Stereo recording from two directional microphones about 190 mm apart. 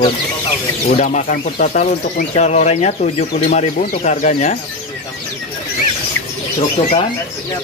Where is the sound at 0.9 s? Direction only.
40° left (ahead or behind).